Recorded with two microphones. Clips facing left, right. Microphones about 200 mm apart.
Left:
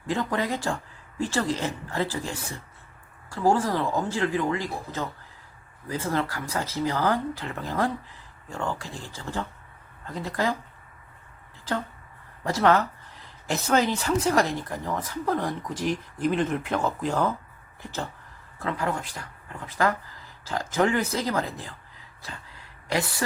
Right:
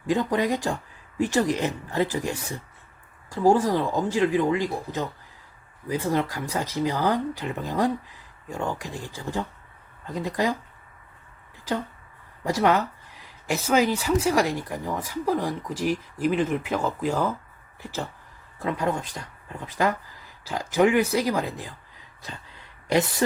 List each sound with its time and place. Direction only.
0.1 s speech: 15° right (ahead or behind)
12.5 s speech: 15° right (ahead or behind)
18.6 s speech: 15° right (ahead or behind)
22.9 s speech: 20° right (ahead or behind)